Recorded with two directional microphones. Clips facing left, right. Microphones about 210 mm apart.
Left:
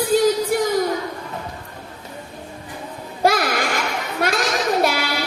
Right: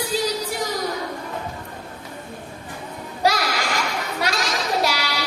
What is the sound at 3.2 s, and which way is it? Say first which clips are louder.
Music: left 3 dB; 50° left (ahead or behind).